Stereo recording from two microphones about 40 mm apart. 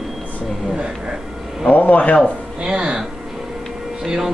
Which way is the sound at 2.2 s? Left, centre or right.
Right.